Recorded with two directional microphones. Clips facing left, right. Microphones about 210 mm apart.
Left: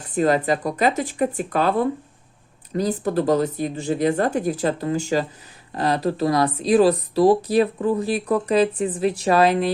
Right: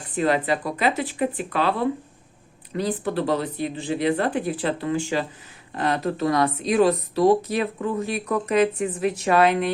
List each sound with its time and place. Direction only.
0.2 s speech: 40° left (ahead or behind)